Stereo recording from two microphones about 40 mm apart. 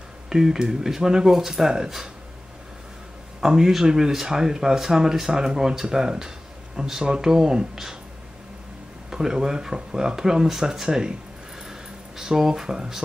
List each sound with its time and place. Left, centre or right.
0.3 s speech: centre
3.3 s speech: centre
9.1 s speech: centre